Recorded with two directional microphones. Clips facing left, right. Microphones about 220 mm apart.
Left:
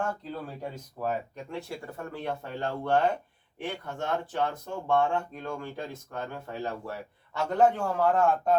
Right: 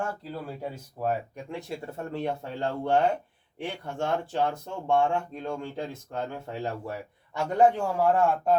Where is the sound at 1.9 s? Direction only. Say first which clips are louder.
Right 4 dB; 25° right (ahead or behind).